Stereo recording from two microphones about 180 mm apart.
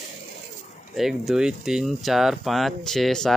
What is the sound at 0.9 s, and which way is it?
Speech, centre (ahead or behind).